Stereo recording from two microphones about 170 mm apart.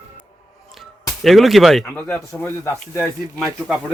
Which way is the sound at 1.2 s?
Centre (ahead or behind).